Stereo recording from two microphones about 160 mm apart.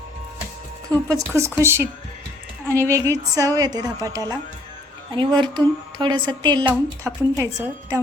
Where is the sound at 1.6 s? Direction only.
15° right (ahead or behind).